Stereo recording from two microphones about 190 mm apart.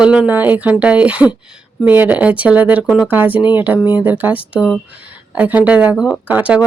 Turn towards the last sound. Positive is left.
turn(degrees=-10)  # may be behind; listen again after turning